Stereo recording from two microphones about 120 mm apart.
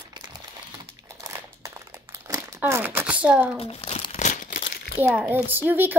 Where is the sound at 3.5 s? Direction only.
55° left (ahead or behind); by 4.6 s 90° left.